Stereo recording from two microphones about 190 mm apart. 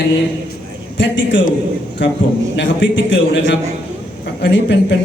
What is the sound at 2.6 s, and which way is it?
A man's voice, 75° left (ahead or behind).